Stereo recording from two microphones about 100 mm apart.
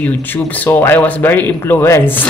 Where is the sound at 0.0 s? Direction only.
15° left (ahead or behind).